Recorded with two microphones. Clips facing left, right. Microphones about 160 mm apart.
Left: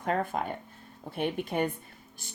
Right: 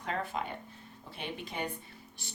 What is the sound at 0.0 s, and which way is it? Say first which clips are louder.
A woman's voice: left 6 dB; 50° left (ahead or behind).